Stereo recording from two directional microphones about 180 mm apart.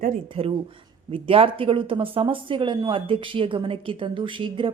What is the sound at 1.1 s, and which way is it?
Speech, 30° right (ahead or behind).